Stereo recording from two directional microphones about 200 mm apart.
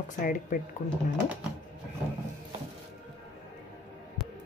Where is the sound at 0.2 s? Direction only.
45° left (ahead or behind).